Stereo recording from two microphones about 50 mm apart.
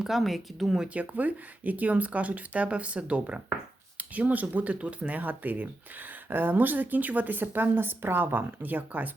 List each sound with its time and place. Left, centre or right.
0.0 s speech: centre
0.9 s speech: right